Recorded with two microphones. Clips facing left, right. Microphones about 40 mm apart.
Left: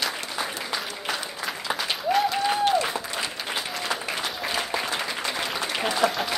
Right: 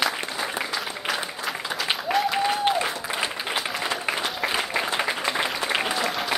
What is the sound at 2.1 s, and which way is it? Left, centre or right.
Applause, centre.